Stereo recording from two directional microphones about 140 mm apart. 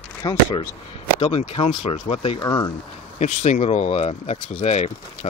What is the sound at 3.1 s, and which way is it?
Speech, 55° left (ahead or behind).